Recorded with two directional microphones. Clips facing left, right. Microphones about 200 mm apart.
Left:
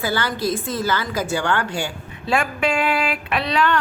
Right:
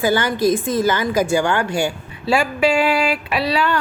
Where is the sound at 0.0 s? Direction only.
15° right (ahead or behind).